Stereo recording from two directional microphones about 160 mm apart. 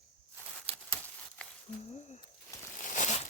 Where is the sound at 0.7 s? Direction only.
40° right (ahead or behind).